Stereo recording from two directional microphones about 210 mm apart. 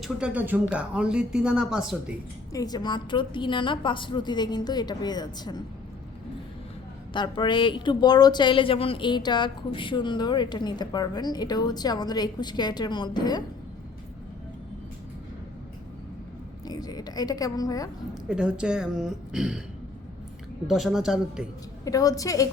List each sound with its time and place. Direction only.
0.0 s speech: 5° right (ahead or behind)
2.5 s speech: 15° left (ahead or behind)
7.1 s speech: 20° left (ahead or behind)
16.6 s a woman's voice: 20° left (ahead or behind)
18.3 s speech: 5° right (ahead or behind)
20.7 s speech: centre (ahead or behind)
21.8 s a woman's voice: 15° left (ahead or behind)